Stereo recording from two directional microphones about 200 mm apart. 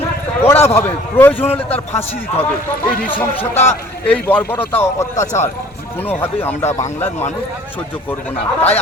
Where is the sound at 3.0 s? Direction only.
10° left (ahead or behind).